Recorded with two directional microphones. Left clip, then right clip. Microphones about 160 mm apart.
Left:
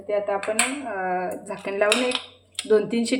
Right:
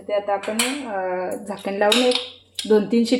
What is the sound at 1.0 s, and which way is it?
Speech, 40° right (ahead or behind).